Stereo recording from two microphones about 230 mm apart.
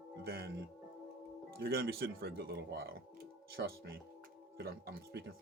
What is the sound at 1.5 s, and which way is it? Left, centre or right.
Speech, right.